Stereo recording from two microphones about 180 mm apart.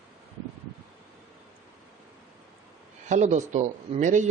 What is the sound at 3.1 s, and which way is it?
Speech, 40° right (ahead or behind).